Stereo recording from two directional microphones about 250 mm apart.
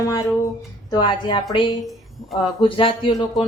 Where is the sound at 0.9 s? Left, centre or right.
Centre.